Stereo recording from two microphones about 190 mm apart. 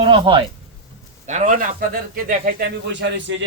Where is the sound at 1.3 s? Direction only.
40° right (ahead or behind).